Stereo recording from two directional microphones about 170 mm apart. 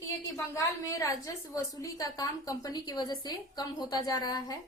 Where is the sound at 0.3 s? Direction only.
20° left (ahead or behind).